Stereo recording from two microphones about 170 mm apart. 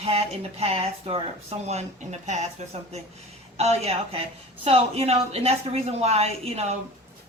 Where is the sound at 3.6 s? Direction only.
35° right (ahead or behind).